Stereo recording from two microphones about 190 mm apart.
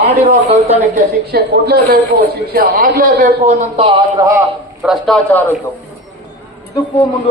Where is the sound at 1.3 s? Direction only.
60° right (ahead or behind); by 4.0 s 35° right (ahead or behind).